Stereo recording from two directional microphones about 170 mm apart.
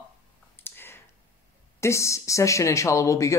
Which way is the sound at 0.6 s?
10° left (ahead or behind).